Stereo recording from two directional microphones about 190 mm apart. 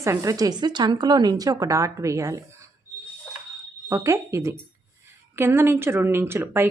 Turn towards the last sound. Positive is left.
turn(degrees=-10)  # may be behind; listen again after turning